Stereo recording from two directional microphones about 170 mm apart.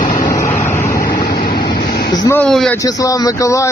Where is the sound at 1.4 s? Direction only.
60° left (ahead or behind).